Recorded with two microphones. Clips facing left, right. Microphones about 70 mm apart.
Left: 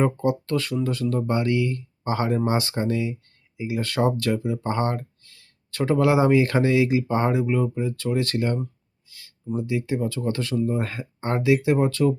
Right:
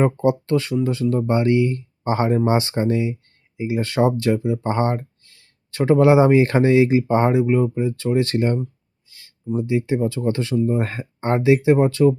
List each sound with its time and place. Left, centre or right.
0.0 s speech: right
9.0 s a sound: right
9.6 s speech: right